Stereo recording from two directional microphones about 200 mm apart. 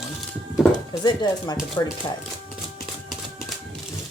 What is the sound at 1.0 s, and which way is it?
Speech, 20° left (ahead or behind).